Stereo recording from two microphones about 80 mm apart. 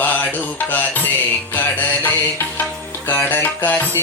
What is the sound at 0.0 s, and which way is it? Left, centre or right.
Mantra, left.